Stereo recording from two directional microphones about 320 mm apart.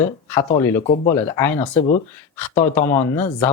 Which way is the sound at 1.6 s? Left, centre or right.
Left.